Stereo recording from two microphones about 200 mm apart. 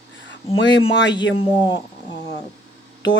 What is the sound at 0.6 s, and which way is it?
Speech, 65° left (ahead or behind).